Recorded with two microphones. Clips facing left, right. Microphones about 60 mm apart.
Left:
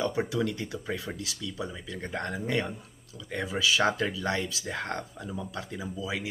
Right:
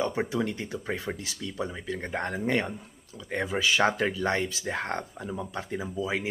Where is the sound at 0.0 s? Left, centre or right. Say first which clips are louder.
Even; right.